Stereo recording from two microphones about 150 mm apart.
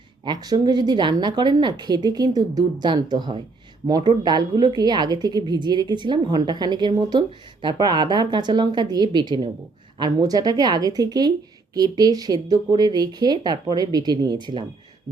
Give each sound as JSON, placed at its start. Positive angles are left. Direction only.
{"t": 0.3, "sound": "a woman's voice", "side_deg": -25}